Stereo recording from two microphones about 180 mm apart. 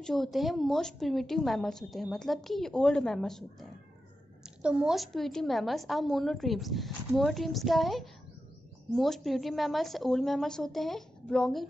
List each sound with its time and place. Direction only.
0.0 s a woman's voice: centre (ahead or behind)